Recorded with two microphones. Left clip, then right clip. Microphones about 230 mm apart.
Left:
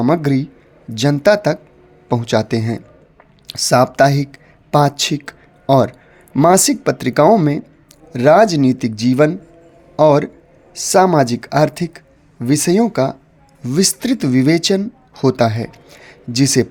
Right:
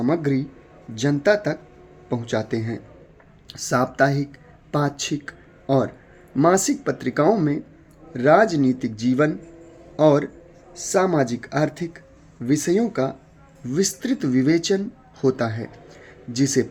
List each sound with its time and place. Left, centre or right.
0.0 s speech: left